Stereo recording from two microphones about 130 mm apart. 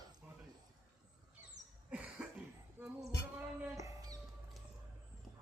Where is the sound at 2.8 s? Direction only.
20° right (ahead or behind).